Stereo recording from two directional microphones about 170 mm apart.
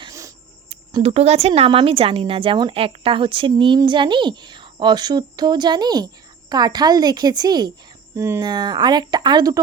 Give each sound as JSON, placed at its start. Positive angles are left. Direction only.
{"t": 0.0, "sound": "insect", "side_deg": -20}
{"t": 0.9, "sound": "speech", "side_deg": -35}